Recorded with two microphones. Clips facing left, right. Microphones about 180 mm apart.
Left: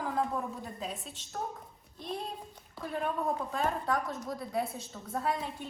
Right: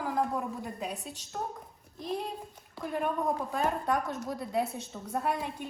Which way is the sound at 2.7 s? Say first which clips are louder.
Right 2 dB; centre (ahead or behind).